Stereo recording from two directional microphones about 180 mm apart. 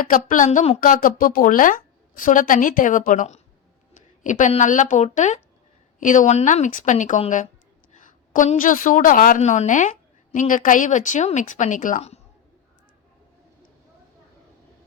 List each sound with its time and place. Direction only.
0.0 s a woman's voice: 50° left (ahead or behind)
0.8 s a woman's voice: 50° left (ahead or behind)